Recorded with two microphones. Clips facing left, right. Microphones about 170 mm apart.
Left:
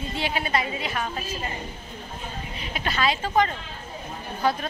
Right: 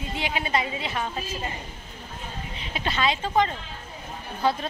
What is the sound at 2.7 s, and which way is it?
Speech, 25° right (ahead or behind).